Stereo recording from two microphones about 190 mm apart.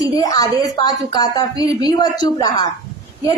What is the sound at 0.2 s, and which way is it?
A woman's voice, 20° left (ahead or behind).